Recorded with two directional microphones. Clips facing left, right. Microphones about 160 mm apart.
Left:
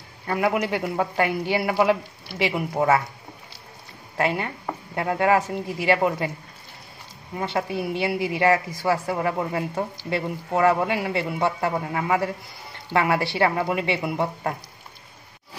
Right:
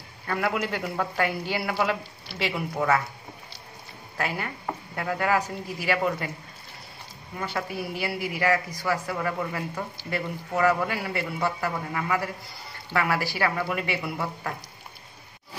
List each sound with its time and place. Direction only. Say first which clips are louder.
0.3 s speech: left 4 dB; 15° left (ahead or behind)
4.2 s speech: left 6 dB; 25° left (ahead or behind)
7.3 s speech: left 5 dB; 25° left (ahead or behind)
9.9 s speech: left 4 dB; 20° left (ahead or behind)